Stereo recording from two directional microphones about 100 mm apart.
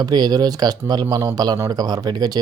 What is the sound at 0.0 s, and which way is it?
Speech, 40° right (ahead or behind).